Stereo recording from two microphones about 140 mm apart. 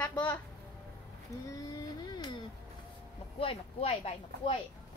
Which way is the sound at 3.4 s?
45° left (ahead or behind).